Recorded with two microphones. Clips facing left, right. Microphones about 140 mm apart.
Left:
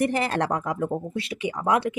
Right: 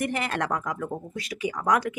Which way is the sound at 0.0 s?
35° left (ahead or behind).